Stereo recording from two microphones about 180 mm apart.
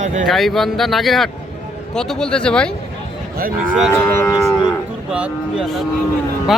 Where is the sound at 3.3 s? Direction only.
50° right (ahead or behind).